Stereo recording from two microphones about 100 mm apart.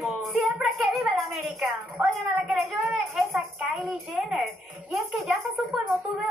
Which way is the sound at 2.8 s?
Centre (ahead or behind).